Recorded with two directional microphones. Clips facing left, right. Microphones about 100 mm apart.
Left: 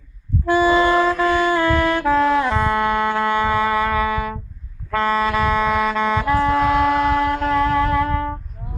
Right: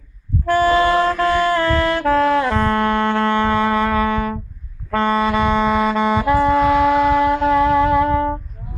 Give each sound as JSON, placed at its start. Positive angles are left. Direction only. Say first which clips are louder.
{"t": 0.4, "sound": "music", "louder": "right 1 dB", "side_deg": 15}
{"t": 0.7, "sound": "music", "louder": "right 1 dB", "side_deg": -5}
{"t": 0.9, "sound": "saxophone", "louder": "right 1 dB", "side_deg": 10}